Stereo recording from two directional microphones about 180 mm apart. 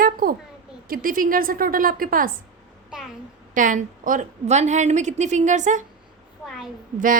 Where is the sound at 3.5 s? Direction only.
45° right (ahead or behind).